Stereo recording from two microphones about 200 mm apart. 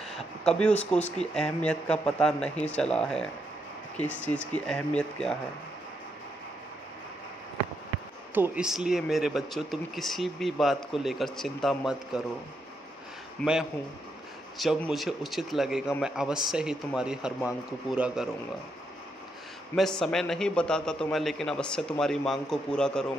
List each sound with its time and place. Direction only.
0.1 s speech: centre (ahead or behind)
8.4 s speech: 5° right (ahead or behind)
13.4 s speech: centre (ahead or behind)
19.7 s speech: centre (ahead or behind)